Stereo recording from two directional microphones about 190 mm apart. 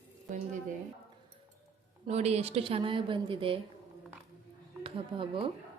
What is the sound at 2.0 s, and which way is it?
A woman's voice, 35° right (ahead or behind).